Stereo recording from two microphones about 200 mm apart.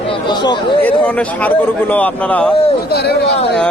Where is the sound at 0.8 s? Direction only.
10° left (ahead or behind).